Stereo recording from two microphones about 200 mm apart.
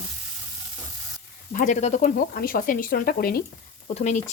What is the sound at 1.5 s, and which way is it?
Speech, 40° left (ahead or behind).